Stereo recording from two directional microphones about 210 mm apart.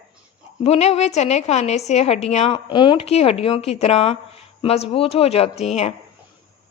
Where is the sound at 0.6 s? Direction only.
30° left (ahead or behind).